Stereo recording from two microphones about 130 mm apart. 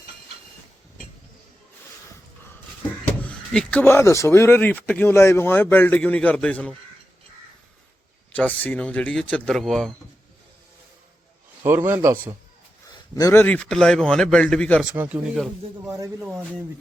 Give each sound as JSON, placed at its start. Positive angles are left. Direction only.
{"t": 3.0, "sound": "speech", "side_deg": 10}
{"t": 8.3, "sound": "speech", "side_deg": 10}
{"t": 11.6, "sound": "a man's voice", "side_deg": -15}
{"t": 12.9, "sound": "a sound", "side_deg": 25}
{"t": 13.4, "sound": "speech", "side_deg": 10}
{"t": 14.8, "sound": "a man's voice", "side_deg": -10}
{"t": 16.2, "sound": "a man's voice", "side_deg": -5}